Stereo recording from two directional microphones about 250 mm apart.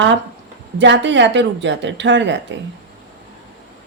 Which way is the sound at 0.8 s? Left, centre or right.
Right.